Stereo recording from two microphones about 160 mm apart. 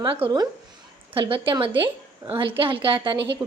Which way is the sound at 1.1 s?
35° right (ahead or behind).